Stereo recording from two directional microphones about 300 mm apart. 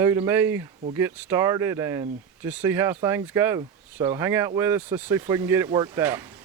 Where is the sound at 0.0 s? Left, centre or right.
Centre.